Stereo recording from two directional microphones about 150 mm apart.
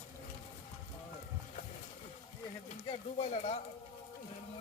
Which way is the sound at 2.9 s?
45° left (ahead or behind).